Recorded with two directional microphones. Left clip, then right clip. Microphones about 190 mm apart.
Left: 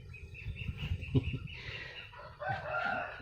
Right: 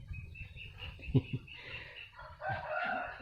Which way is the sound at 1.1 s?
10° right (ahead or behind).